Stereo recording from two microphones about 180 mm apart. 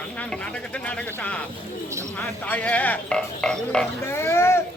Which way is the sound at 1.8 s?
15° right (ahead or behind).